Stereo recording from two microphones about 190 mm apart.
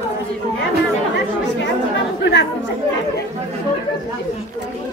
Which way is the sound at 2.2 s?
65° left (ahead or behind).